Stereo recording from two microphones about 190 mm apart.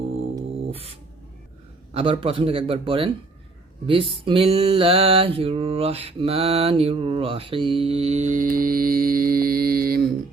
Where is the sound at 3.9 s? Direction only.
25° right (ahead or behind); by 10.0 s 50° right (ahead or behind).